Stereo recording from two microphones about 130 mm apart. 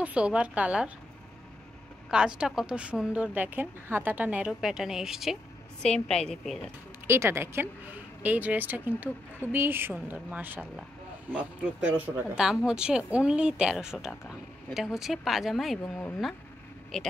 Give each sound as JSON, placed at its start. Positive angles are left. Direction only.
{"t": 0.0, "sound": "a woman's voice", "side_deg": -10}
{"t": 2.0, "sound": "a woman's voice", "side_deg": -5}
{"t": 7.1, "sound": "a woman's voice", "side_deg": -20}
{"t": 12.4, "sound": "a woman's voice", "side_deg": -5}
{"t": 15.8, "sound": "speech", "side_deg": 15}
{"t": 16.9, "sound": "a woman's voice", "side_deg": 0}